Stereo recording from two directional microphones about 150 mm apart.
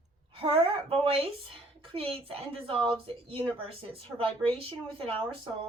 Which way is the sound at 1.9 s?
35° right (ahead or behind).